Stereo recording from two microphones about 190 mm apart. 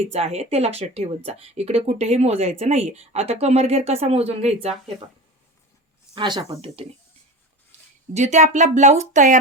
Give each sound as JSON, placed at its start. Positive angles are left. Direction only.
{"t": 0.0, "sound": "speech", "side_deg": -35}
{"t": 6.1, "sound": "speech", "side_deg": -25}
{"t": 8.1, "sound": "speech", "side_deg": -40}